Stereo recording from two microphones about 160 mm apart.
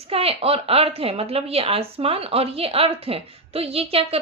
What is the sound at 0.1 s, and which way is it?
A woman's voice, 35° right (ahead or behind).